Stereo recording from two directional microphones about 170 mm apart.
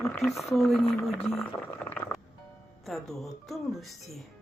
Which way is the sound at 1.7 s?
10° left (ahead or behind).